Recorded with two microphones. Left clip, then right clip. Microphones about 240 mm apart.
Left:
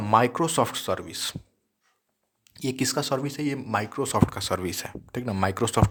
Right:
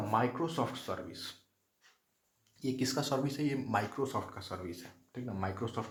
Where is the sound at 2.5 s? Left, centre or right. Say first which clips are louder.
Left 8 dB; left.